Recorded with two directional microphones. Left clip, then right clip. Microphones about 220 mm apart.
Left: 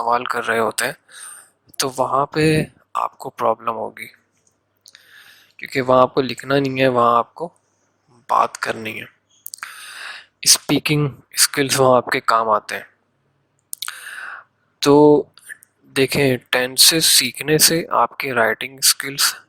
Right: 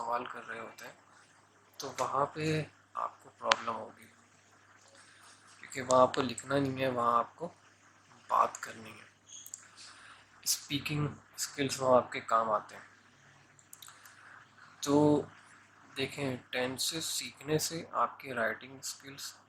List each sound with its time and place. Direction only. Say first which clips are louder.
0.1 s speech: left 18 dB; 50° left (ahead or behind)
5.5 s speech: left 12 dB; 40° left (ahead or behind)
10.4 s speech: left 19 dB; 45° left (ahead or behind)
14.8 s speech: left 16 dB; 40° left (ahead or behind)